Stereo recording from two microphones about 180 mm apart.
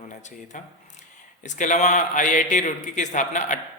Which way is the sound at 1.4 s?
45° left (ahead or behind).